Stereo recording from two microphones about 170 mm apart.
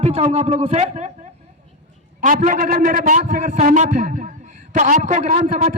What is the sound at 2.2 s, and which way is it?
A man's voice, 50° right (ahead or behind).